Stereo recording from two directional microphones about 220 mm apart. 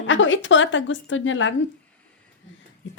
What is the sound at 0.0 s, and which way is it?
A woman's voice, 60° left (ahead or behind).